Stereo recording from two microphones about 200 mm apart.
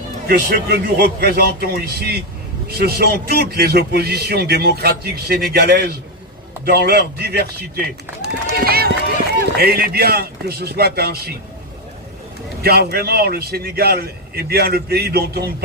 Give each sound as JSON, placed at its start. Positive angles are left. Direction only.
{"t": 0.3, "sound": "speech", "side_deg": -50}
{"t": 12.6, "sound": "speech", "side_deg": -50}